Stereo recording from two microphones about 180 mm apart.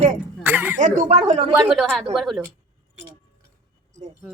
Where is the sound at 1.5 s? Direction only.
Centre (ahead or behind).